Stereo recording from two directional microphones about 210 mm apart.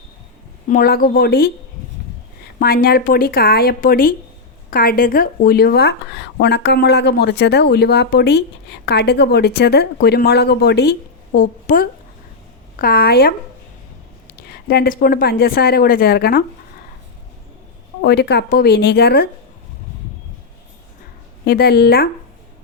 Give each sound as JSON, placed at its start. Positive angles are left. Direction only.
{"t": 0.7, "sound": "speech", "side_deg": 45}
{"t": 2.6, "sound": "speech", "side_deg": 45}
{"t": 14.7, "sound": "speech", "side_deg": 45}
{"t": 18.0, "sound": "speech", "side_deg": 55}
{"t": 21.4, "sound": "speech", "side_deg": 50}